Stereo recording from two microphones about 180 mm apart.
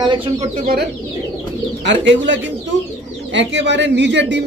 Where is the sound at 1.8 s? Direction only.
90° right.